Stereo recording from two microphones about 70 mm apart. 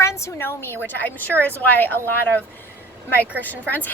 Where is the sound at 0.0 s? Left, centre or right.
Left.